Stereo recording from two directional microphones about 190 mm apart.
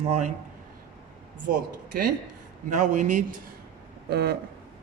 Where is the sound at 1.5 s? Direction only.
45° right (ahead or behind).